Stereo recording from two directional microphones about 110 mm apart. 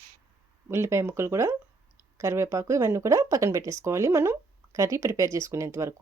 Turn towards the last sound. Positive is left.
turn(degrees=-25)  # may be behind; listen again after turning